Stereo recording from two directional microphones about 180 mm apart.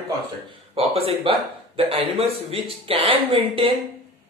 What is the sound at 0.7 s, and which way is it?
Speech, 30° right (ahead or behind).